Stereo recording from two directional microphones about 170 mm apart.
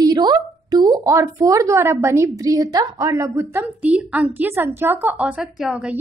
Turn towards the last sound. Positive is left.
turn(degrees=-5)  # may be behind; listen again after turning